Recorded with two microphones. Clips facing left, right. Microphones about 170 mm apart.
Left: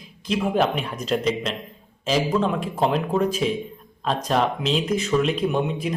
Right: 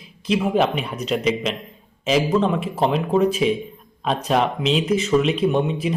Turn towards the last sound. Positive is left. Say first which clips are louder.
# right 3 dB
turn(degrees=0)  # may be behind; listen again after turning